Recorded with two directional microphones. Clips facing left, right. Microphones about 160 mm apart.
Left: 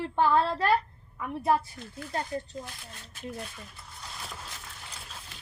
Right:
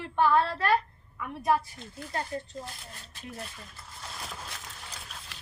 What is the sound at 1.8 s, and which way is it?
Speech, 25° right (ahead or behind).